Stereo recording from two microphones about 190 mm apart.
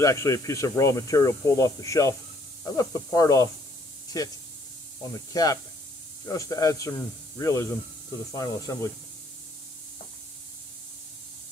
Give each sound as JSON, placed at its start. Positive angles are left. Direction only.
{"t": 0.0, "sound": "speech", "side_deg": 15}
{"t": 5.1, "sound": "speech", "side_deg": 20}